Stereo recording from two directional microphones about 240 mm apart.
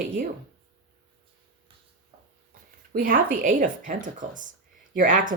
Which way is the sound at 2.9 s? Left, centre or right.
Right.